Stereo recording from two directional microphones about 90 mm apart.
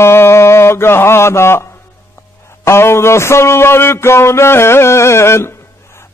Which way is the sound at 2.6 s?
30° left (ahead or behind).